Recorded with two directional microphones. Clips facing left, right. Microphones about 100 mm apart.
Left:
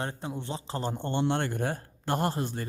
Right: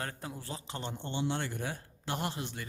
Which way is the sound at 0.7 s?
40° left (ahead or behind).